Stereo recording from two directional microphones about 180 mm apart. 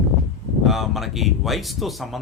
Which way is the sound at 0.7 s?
Centre (ahead or behind).